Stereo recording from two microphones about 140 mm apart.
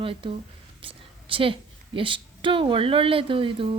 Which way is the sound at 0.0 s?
40° right (ahead or behind).